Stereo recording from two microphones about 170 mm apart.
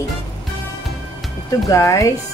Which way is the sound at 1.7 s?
20° left (ahead or behind).